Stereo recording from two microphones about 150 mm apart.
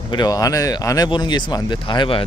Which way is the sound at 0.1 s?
25° left (ahead or behind).